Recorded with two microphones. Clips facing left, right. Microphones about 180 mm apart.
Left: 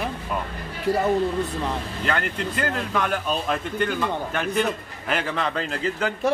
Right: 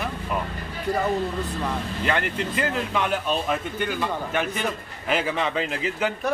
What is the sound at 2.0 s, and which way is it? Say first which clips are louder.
Speech: right 1 dB; 5° right (ahead or behind).